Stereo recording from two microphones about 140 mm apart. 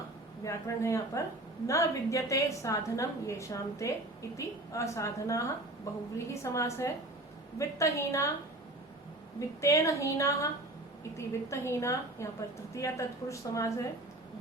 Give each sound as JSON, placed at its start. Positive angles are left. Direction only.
{"t": 0.4, "sound": "a woman's voice", "side_deg": 20}
{"t": 9.6, "sound": "a woman's voice", "side_deg": 20}